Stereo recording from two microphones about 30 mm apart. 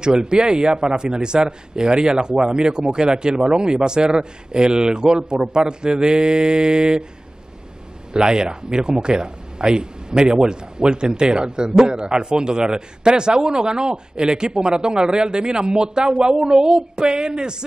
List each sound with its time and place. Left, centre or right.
0.0 s a man's voice: right
8.1 s a man's voice: right